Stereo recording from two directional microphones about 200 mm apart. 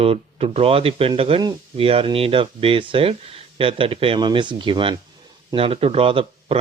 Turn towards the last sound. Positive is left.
turn(degrees=-30)  # may be behind; listen again after turning